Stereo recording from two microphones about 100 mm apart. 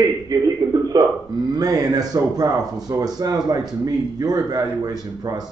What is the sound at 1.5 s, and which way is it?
A man's voice, 40° right (ahead or behind).